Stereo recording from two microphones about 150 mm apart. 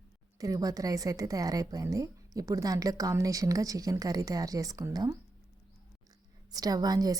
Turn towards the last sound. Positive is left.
turn(degrees=-25)  # may be behind; listen again after turning